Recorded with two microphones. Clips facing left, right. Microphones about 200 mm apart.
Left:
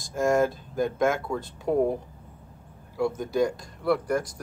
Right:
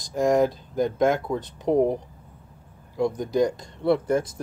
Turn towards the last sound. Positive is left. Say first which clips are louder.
# right 3 dB
turn(degrees=-25)  # may be behind; listen again after turning